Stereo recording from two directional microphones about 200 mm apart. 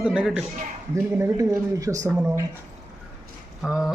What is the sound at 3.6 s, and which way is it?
Speech, centre (ahead or behind).